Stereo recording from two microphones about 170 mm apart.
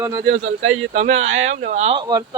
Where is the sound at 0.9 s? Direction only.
40° right (ahead or behind); by 2.2 s 25° right (ahead or behind).